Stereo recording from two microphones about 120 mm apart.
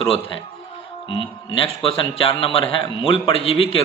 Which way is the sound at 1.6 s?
50° left (ahead or behind).